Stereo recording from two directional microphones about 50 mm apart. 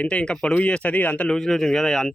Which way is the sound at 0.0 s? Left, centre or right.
Centre.